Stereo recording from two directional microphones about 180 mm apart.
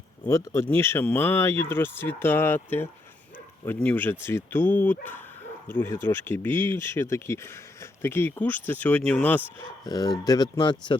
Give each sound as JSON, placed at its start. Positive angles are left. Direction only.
{"t": 0.3, "sound": "speech", "side_deg": 15}
{"t": 9.8, "sound": "speech", "side_deg": 20}